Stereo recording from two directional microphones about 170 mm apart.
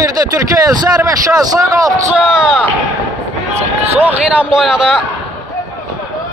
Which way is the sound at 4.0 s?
5° right (ahead or behind).